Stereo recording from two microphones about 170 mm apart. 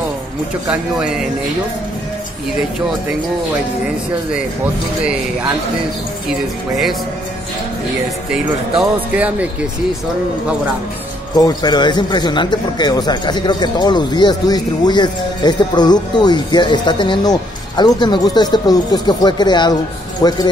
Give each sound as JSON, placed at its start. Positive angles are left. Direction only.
{"t": 0.7, "sound": "speech", "side_deg": -5}
{"t": 8.7, "sound": "speech", "side_deg": -10}
{"t": 11.3, "sound": "speech", "side_deg": 25}